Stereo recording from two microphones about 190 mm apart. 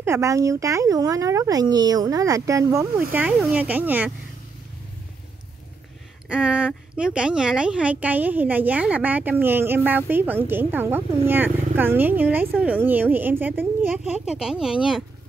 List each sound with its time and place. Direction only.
0.0 s a woman's voice: 15° right (ahead or behind)
3.1 s a woman's voice: 5° right (ahead or behind)
6.2 s a woman's voice: 5° right (ahead or behind)